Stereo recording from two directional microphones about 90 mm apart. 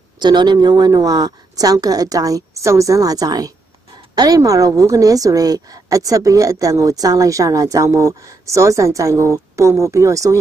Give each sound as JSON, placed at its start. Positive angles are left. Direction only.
{"t": 0.2, "sound": "a woman's voice", "side_deg": -55}